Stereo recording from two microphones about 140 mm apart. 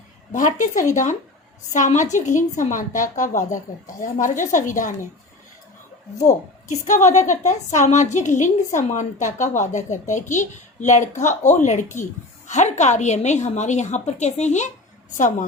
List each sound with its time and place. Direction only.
0.3 s a woman's voice: 65° left (ahead or behind)
6.8 s a woman's voice: 60° left (ahead or behind)